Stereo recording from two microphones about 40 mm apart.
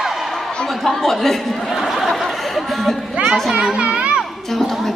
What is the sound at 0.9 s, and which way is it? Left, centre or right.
Speech, centre.